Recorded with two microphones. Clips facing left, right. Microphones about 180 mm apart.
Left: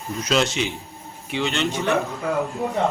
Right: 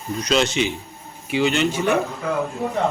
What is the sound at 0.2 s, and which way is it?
Speech, centre (ahead or behind).